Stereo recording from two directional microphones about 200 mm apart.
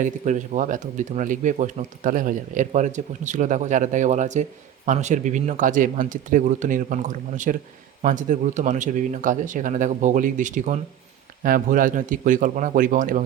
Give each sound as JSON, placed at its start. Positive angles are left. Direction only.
{"t": 0.0, "sound": "speech", "side_deg": -40}